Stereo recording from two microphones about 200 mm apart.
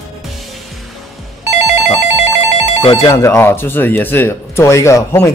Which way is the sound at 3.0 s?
10° left (ahead or behind).